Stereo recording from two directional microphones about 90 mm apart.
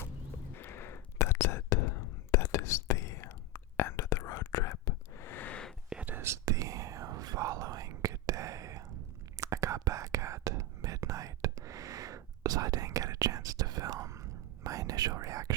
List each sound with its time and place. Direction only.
0.5 s whispering: 25° left (ahead or behind)
5.2 s a sound: 20° left (ahead or behind)
5.9 s whispering: 15° right (ahead or behind)
6.1 s whispering: 30° right (ahead or behind)